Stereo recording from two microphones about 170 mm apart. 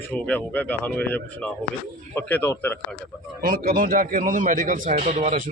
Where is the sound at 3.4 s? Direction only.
60° right (ahead or behind).